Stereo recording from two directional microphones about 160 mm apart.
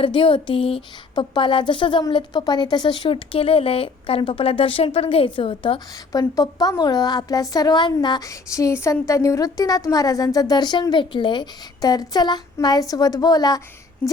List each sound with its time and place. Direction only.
0.0 s speech: 30° left (ahead or behind)
6.1 s a woman's voice: 20° left (ahead or behind)
14.0 s speech: 10° left (ahead or behind)